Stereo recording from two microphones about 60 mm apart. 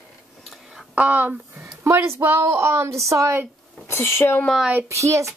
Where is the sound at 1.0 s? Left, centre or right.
Right.